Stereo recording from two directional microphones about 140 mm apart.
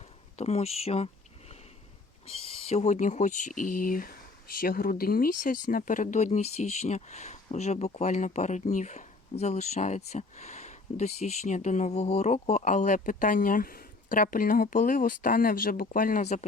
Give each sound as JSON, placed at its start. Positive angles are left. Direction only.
{"t": 0.3, "sound": "speech", "side_deg": 45}